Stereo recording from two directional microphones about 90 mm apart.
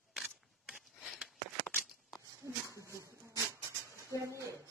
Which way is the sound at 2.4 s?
25° right (ahead or behind).